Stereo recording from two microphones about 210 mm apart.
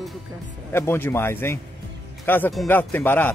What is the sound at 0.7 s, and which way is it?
Speech, 10° left (ahead or behind).